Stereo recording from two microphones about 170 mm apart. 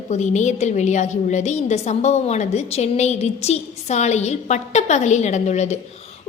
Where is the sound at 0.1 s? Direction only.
45° left (ahead or behind).